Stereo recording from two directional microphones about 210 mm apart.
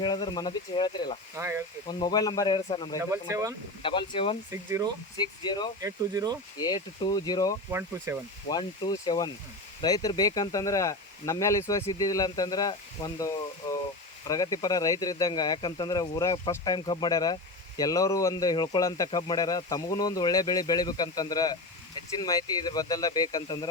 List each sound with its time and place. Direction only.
0.0 s speech: 20° left (ahead or behind)
1.4 s speech: 15° right (ahead or behind)
1.9 s speech: 20° left (ahead or behind)
3.0 s speech: 15° right (ahead or behind)
3.8 s speech: 25° left (ahead or behind)
4.5 s speech: 15° right (ahead or behind)
5.1 s speech: 20° left (ahead or behind)
5.8 s speech: 15° right (ahead or behind)
6.6 s speech: 20° left (ahead or behind)
7.7 s speech: 10° right (ahead or behind)
8.4 s speech: 20° left (ahead or behind)